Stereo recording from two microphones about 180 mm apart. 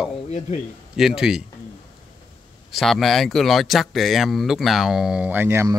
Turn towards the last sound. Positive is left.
turn(degrees=-15)  # may be behind; listen again after turning